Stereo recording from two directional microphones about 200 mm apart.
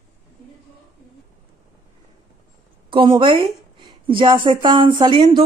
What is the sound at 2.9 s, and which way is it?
A woman's voice, 25° right (ahead or behind).